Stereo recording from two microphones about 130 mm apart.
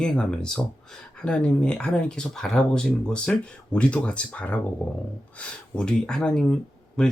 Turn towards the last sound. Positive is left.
turn(degrees=5)  # may be behind; listen again after turning